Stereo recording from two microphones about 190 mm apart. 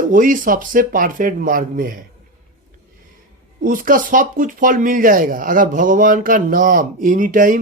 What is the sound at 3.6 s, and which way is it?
Speech, 45° right (ahead or behind).